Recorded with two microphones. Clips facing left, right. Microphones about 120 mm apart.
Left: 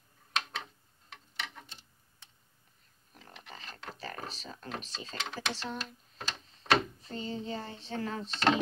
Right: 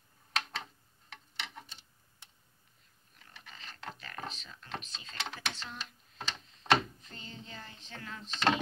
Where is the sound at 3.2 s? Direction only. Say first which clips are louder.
Left 4 dB; 35° left (ahead or behind).